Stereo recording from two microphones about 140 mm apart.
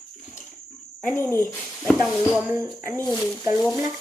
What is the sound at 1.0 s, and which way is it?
Speech, 15° left (ahead or behind).